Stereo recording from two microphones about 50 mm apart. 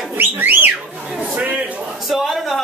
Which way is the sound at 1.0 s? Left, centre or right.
Right.